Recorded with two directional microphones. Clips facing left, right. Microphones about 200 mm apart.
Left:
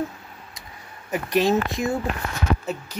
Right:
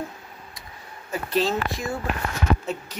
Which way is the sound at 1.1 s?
15° left (ahead or behind).